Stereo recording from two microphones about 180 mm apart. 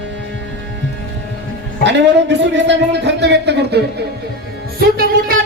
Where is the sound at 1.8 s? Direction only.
80° right.